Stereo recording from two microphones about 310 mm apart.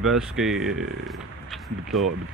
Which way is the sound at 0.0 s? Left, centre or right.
Centre.